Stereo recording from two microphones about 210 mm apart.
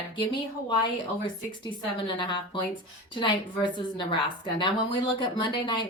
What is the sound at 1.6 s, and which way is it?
Speech, 25° left (ahead or behind).